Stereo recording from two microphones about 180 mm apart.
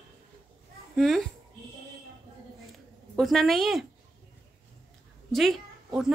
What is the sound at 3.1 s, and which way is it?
Speech, centre (ahead or behind).